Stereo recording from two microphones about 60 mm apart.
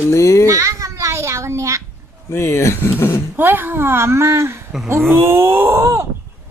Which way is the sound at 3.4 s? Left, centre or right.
Right.